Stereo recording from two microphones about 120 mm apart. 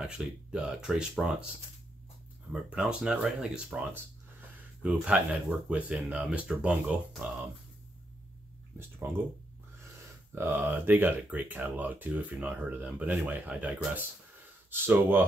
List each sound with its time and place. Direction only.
0.0 s speech: 5° right (ahead or behind)
2.5 s speech: 10° right (ahead or behind)
10.3 s speech: 15° right (ahead or behind)